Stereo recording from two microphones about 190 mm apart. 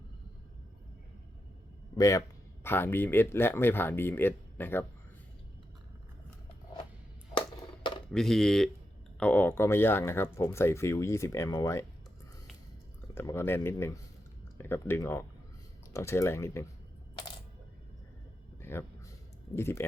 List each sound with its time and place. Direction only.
2.0 s speech: 15° left (ahead or behind)
8.1 s speech: centre (ahead or behind)
13.1 s speech: 15° left (ahead or behind)
18.6 s speech: 10° left (ahead or behind)